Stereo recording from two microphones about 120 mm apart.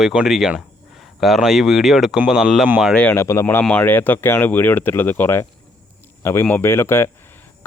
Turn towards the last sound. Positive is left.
turn(degrees=20)  # may be behind; listen again after turning